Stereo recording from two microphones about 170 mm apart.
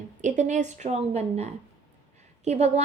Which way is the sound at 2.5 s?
40° right (ahead or behind).